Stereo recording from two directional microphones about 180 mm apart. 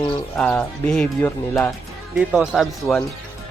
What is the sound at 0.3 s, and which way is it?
Speech, 5° left (ahead or behind).